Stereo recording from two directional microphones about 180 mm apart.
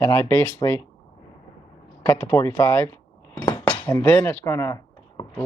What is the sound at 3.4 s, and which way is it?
Cutlery, 15° left (ahead or behind).